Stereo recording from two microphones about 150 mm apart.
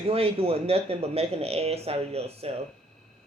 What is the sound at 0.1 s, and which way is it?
Speech, 40° right (ahead or behind).